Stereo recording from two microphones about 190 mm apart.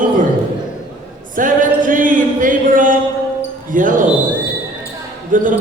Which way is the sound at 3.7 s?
45° right (ahead or behind).